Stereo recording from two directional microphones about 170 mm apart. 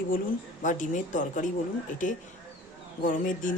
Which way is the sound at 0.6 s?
50° left (ahead or behind).